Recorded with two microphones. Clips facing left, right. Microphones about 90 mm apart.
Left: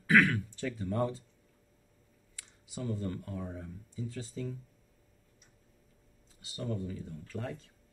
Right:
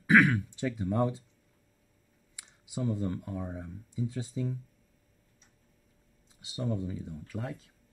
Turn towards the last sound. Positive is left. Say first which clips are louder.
# right 1 dB
turn(degrees=-10)  # may be behind; listen again after turning